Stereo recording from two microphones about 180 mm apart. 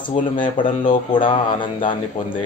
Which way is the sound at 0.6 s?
45° left (ahead or behind).